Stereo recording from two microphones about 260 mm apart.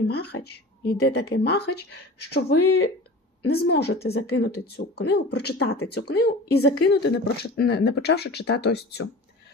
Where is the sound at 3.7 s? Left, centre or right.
Left.